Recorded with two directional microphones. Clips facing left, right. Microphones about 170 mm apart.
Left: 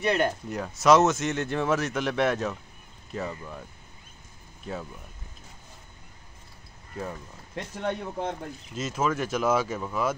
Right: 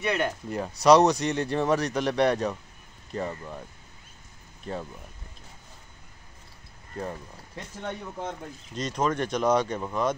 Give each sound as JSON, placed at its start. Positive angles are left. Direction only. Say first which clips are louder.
{"t": 0.0, "sound": "speech", "louder": "left 2 dB", "side_deg": 35}
{"t": 0.5, "sound": "speech", "louder": "right 2 dB", "side_deg": 0}
{"t": 4.7, "sound": "speech", "louder": "right 1 dB", "side_deg": 0}
{"t": 7.5, "sound": "speech", "louder": "left 5 dB", "side_deg": 70}
{"t": 8.7, "sound": "speech", "louder": "right 1 dB", "side_deg": 5}